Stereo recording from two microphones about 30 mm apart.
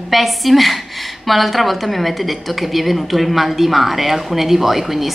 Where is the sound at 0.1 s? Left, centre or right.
Centre.